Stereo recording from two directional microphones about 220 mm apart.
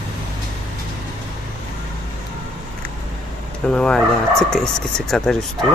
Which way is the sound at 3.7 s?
5° left (ahead or behind).